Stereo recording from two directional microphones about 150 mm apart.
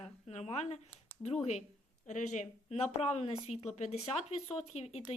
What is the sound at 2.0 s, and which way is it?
Speech, 55° left (ahead or behind).